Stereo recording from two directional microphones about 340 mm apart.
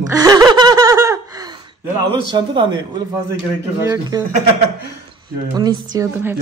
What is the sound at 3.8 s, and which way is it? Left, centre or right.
Speech, centre.